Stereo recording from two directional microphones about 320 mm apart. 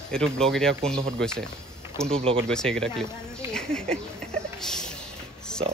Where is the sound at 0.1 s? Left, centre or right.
Centre.